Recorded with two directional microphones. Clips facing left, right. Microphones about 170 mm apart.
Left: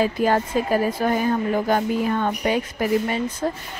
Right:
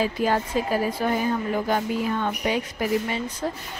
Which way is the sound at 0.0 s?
50° left (ahead or behind).